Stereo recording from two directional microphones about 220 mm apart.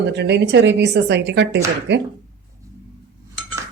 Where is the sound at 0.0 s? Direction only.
50° right (ahead or behind).